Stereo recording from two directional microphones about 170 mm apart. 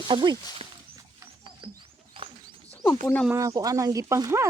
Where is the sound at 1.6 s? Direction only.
30° right (ahead or behind).